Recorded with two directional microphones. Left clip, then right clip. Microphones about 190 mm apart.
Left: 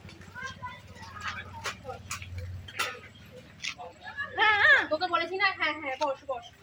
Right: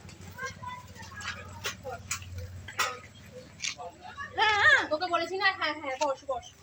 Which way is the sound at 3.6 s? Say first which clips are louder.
Right 1 dB; 5° right (ahead or behind).